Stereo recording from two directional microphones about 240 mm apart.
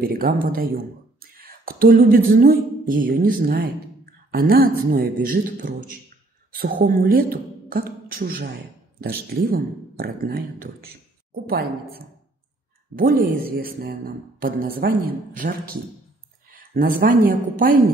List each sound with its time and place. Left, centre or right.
0.0 s speech: right
1.3 s a sound: right
6.5 s a woman's voice: right